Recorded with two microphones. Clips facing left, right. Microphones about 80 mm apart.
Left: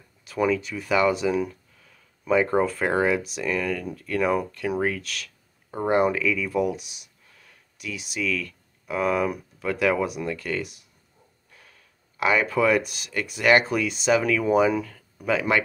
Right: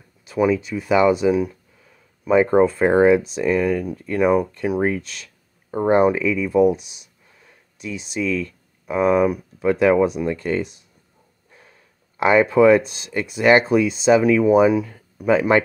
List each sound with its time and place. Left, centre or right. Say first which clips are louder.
0.4 s speech: right 5 dB; centre
15.2 s speech: right 7 dB; right